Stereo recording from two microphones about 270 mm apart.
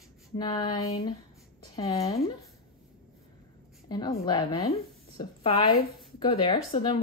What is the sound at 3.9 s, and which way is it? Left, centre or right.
Speech, centre.